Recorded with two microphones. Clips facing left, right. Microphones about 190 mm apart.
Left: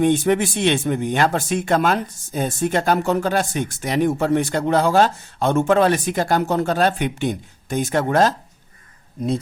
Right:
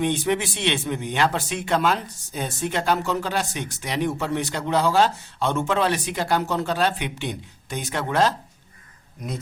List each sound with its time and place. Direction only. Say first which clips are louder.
0.0 s speech: left 6 dB; 50° left (ahead or behind)